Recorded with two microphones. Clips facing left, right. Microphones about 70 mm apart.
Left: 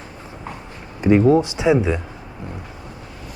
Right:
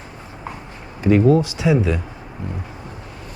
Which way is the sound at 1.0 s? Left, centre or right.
Left.